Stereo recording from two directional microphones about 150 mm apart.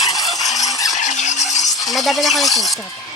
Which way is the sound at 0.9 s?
55° left (ahead or behind).